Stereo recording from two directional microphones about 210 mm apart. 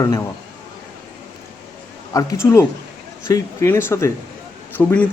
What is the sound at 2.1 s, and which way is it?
Speech, 15° left (ahead or behind).